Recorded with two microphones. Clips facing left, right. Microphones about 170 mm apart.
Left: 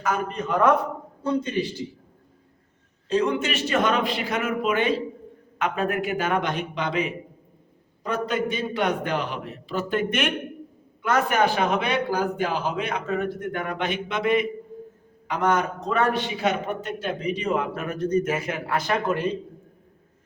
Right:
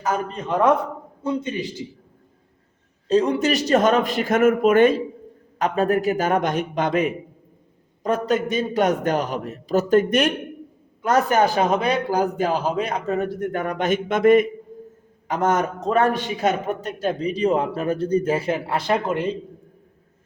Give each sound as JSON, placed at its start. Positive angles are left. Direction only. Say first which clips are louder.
{"t": 0.0, "sound": "a man's voice", "louder": "right 1 dB", "side_deg": -30}
{"t": 3.1, "sound": "a man's voice", "louder": "right 5 dB", "side_deg": -35}
{"t": 5.5, "sound": "a man's voice", "louder": "right 5 dB", "side_deg": -35}